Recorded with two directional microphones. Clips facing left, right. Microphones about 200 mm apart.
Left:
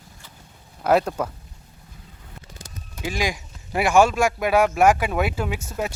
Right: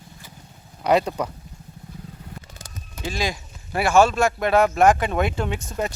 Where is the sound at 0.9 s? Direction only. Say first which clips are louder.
Even; centre (ahead or behind).